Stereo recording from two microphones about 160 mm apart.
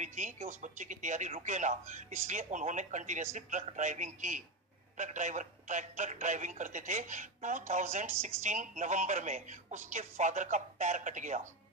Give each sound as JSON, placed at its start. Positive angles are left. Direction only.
{"t": 0.0, "sound": "a woman's voice", "side_deg": -50}